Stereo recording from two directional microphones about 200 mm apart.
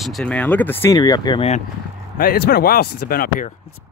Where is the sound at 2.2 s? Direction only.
50° left (ahead or behind).